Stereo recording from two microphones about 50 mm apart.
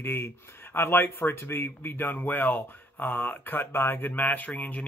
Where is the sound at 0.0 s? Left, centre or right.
Left.